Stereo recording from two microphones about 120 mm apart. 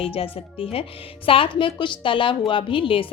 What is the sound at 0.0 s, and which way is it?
A woman's voice, 55° left (ahead or behind).